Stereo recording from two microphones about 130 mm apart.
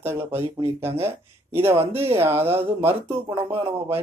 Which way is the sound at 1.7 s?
50° right (ahead or behind).